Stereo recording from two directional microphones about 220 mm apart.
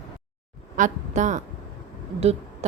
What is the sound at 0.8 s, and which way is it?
Speech, 35° right (ahead or behind).